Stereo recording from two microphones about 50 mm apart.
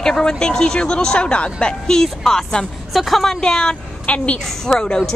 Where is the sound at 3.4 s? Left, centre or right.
Centre.